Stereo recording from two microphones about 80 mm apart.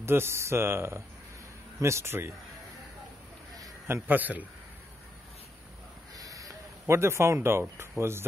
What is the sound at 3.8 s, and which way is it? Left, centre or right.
Speech, right.